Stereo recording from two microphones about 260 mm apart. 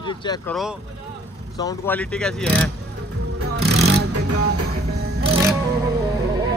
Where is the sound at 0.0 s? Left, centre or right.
Centre.